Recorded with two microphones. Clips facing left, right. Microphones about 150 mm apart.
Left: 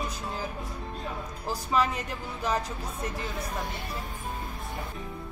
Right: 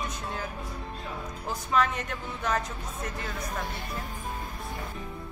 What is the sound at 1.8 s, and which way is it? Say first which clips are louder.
Speech: right 1 dB; 30° left (ahead or behind).